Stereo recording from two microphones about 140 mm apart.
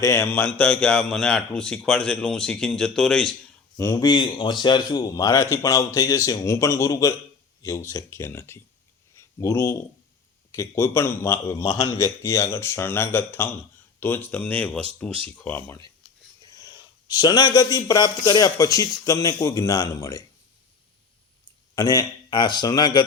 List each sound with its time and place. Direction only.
0.0 s a man's voice: 20° left (ahead or behind)
3.8 s speech: 25° left (ahead or behind)
16.4 s speech: 30° left (ahead or behind)
21.8 s a man's voice: 30° left (ahead or behind)